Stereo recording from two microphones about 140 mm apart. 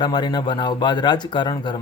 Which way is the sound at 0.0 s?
30° left (ahead or behind).